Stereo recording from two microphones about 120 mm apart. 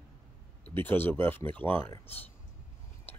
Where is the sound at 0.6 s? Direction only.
15° left (ahead or behind).